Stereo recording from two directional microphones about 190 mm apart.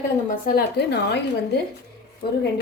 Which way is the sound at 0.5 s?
60° left (ahead or behind).